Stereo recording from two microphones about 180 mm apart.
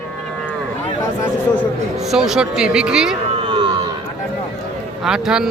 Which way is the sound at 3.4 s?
30° right (ahead or behind).